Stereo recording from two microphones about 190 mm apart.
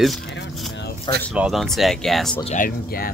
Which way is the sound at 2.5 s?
45° left (ahead or behind).